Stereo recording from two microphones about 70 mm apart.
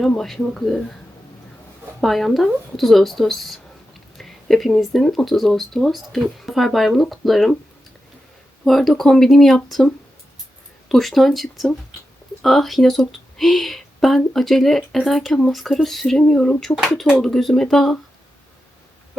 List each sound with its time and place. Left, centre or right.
0.2 s speech: centre
2.0 s speech: centre
8.6 s speech: centre